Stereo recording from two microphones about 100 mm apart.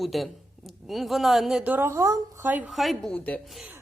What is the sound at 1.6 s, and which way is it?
Speech, 15° right (ahead or behind).